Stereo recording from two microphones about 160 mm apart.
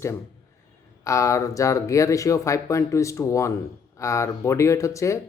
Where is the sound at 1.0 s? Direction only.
20° left (ahead or behind).